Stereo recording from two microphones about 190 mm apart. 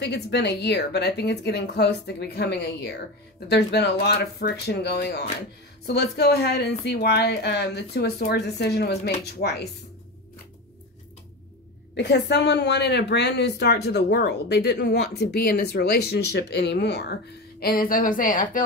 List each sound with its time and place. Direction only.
0.0 s a woman's voice: 60° left (ahead or behind)
11.9 s a woman's voice: 60° left (ahead or behind)
17.6 s a woman's voice: 50° left (ahead or behind)